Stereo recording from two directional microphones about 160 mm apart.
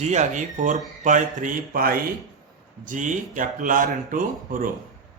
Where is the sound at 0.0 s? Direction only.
45° right (ahead or behind); by 2.0 s 65° right (ahead or behind).